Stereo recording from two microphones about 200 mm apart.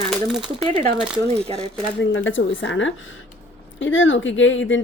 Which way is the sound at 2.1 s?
75° left (ahead or behind).